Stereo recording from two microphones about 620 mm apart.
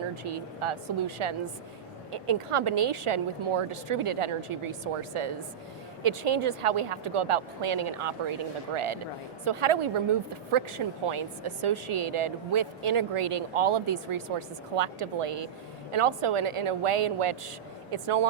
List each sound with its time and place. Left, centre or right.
0.3 s a woman's voice: right